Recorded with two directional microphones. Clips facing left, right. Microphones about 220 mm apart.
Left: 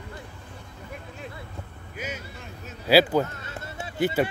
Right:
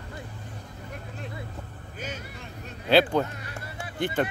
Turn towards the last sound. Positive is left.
turn(degrees=10)  # may be behind; listen again after turning